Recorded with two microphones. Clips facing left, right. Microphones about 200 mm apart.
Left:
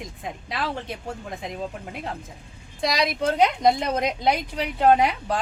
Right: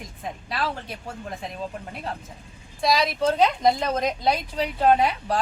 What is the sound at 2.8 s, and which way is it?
A woman's voice, 20° left (ahead or behind).